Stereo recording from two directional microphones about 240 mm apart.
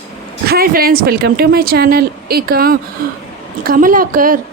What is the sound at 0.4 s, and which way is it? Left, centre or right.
A woman's voice, right.